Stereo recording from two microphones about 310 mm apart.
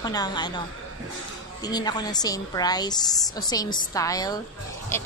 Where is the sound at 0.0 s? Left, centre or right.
Centre.